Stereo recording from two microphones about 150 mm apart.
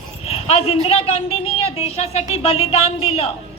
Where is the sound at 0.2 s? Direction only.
40° left (ahead or behind).